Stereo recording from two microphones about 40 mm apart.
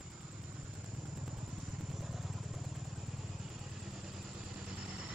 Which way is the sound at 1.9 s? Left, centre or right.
Centre.